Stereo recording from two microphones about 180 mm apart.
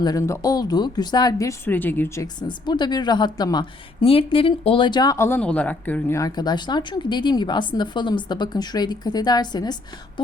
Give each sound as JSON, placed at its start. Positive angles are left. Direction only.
{"t": 0.0, "sound": "a woman's voice", "side_deg": 20}
{"t": 2.2, "sound": "a woman's voice", "side_deg": 25}